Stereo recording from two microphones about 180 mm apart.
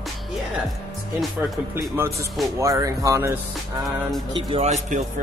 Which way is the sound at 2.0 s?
15° right (ahead or behind).